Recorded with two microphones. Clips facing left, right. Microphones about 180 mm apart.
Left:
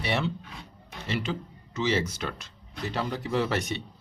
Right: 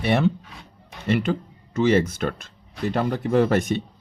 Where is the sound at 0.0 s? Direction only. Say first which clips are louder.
Right 8 dB; 50° right (ahead or behind).